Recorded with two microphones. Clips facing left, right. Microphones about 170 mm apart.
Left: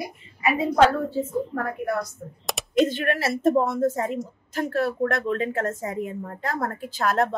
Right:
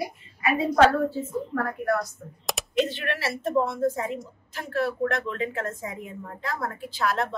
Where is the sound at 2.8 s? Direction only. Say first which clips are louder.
Left 5 dB; 45° left (ahead or behind).